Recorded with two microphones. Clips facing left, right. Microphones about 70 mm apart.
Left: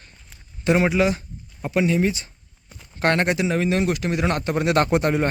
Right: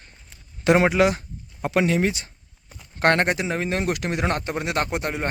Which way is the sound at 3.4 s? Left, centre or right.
Right.